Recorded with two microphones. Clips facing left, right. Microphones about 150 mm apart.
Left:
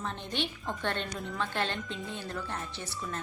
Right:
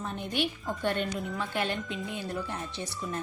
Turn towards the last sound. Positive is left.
turn(degrees=-15)  # may be behind; listen again after turning